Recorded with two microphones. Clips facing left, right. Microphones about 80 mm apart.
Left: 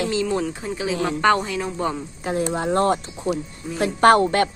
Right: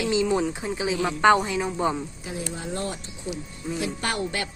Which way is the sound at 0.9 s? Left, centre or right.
Left.